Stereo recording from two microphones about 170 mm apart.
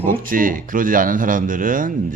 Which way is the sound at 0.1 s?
55° right (ahead or behind).